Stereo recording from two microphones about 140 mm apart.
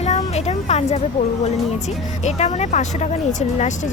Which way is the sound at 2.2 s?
55° left (ahead or behind).